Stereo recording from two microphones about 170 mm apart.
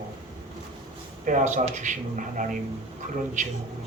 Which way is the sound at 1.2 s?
50° right (ahead or behind).